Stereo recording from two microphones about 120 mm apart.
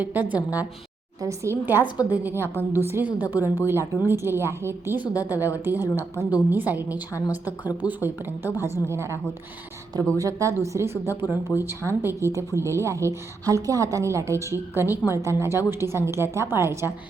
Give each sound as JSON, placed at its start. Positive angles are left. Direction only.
{"t": 0.0, "sound": "a woman's voice", "side_deg": -15}
{"t": 1.2, "sound": "a woman's voice", "side_deg": -25}
{"t": 10.2, "sound": "a woman's voice", "side_deg": -25}